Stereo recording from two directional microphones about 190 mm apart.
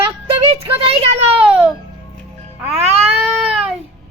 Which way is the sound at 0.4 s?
30° right (ahead or behind).